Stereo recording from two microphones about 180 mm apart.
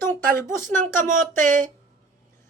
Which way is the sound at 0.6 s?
45° right (ahead or behind).